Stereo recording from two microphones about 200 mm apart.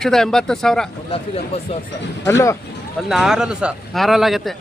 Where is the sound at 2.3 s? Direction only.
15° left (ahead or behind).